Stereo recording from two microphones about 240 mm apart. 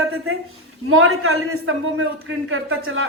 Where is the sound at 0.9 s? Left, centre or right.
Right.